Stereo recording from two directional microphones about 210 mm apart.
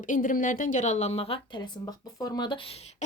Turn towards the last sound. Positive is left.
turn(degrees=25)  # may be behind; listen again after turning